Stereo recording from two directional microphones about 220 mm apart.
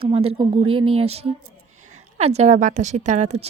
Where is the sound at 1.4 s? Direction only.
80° right.